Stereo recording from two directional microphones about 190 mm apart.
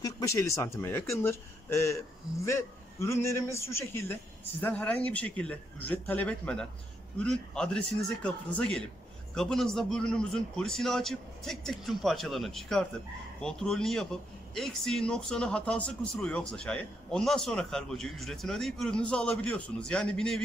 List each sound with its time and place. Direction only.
0.0 s a man's voice: 15° left (ahead or behind)